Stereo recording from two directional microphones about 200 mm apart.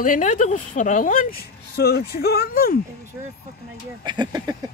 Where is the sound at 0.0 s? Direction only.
40° left (ahead or behind).